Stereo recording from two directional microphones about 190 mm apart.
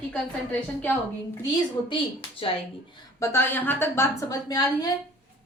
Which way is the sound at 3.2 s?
15° left (ahead or behind).